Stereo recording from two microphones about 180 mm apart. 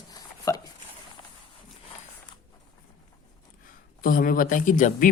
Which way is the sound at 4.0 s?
50° left (ahead or behind).